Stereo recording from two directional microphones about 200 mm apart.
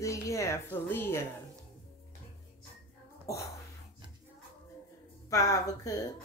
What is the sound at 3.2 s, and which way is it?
Speech, 15° left (ahead or behind).